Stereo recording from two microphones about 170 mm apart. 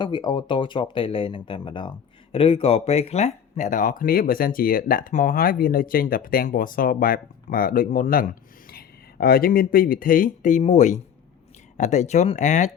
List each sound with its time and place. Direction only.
0.0 s speech: 25° left (ahead or behind); by 12.7 s 45° left (ahead or behind)